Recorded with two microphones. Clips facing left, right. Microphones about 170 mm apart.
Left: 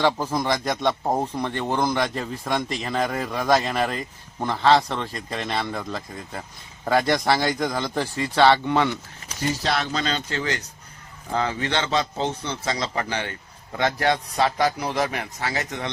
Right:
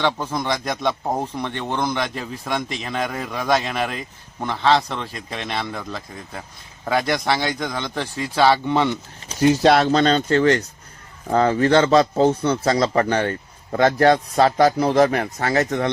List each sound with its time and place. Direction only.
0.0 s speech: 5° left (ahead or behind); by 9.3 s 20° right (ahead or behind)
9.4 s speech: 65° right (ahead or behind)
10.0 s a man's voice: 50° right (ahead or behind)